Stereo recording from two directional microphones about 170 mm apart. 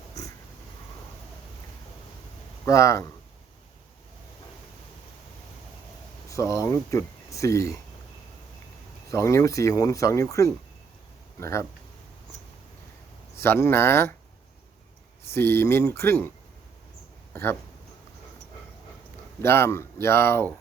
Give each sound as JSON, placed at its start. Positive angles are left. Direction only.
{"t": 2.6, "sound": "speech", "side_deg": 20}
{"t": 6.2, "sound": "speech", "side_deg": 20}
{"t": 9.0, "sound": "speech", "side_deg": 20}
{"t": 13.3, "sound": "speech", "side_deg": 15}
{"t": 15.3, "sound": "speech", "side_deg": 15}
{"t": 17.3, "sound": "speech", "side_deg": 15}
{"t": 19.4, "sound": "speech", "side_deg": 15}